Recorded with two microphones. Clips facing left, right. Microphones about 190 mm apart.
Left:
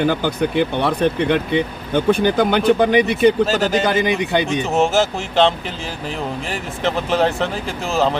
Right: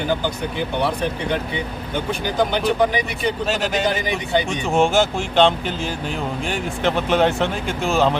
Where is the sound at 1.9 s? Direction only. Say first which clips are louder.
Left 9 dB; 55° left (ahead or behind).